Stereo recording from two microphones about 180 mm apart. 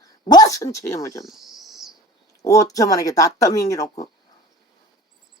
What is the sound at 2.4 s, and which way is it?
Speech, 20° left (ahead or behind).